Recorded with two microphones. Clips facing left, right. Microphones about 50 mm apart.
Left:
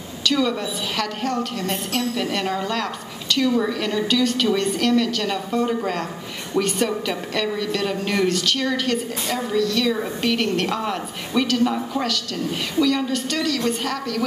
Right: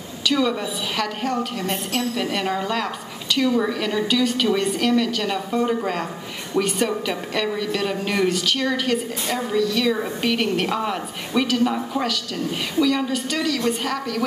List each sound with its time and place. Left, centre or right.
0.2 s a woman's voice: centre